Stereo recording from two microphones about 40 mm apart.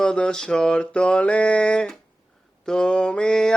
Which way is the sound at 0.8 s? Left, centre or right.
Left.